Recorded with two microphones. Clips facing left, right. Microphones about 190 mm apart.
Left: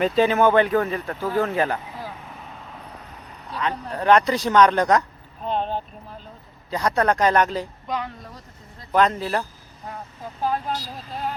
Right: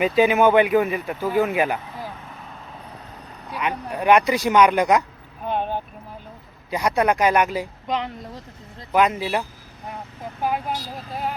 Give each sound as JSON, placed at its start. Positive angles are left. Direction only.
{"t": 0.0, "sound": "speech", "side_deg": -10}
{"t": 3.5, "sound": "speech", "side_deg": -15}
{"t": 5.5, "sound": "vehicle", "side_deg": -10}
{"t": 6.7, "sound": "speech", "side_deg": -10}
{"t": 7.9, "sound": "speech", "side_deg": -20}
{"t": 8.9, "sound": "speech", "side_deg": -10}